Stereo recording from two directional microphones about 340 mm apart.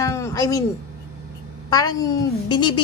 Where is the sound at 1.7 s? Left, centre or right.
Centre.